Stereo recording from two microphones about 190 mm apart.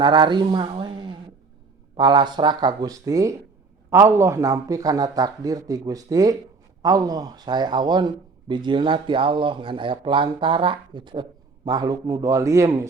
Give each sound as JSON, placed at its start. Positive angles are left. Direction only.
{"t": 0.0, "sound": "a man's voice", "side_deg": -25}